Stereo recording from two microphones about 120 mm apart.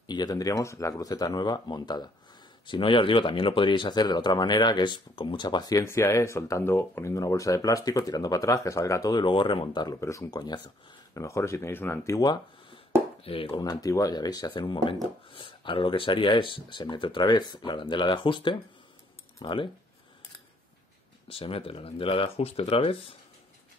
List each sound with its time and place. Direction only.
0.0 s speech: 35° left (ahead or behind)
9.2 s speech: 40° left (ahead or behind)
9.9 s speech: 25° left (ahead or behind)
11.1 s speech: 25° left (ahead or behind)
13.2 s speech: 50° left (ahead or behind)
13.6 s speech: 30° left (ahead or behind)
21.3 s speech: 50° left (ahead or behind)